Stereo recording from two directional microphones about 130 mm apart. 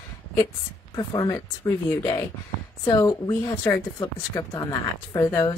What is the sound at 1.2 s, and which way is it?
Speech, 25° left (ahead or behind).